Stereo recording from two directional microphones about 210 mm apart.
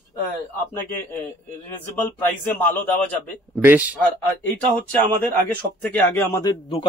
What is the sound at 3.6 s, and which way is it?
Speech, 10° right (ahead or behind).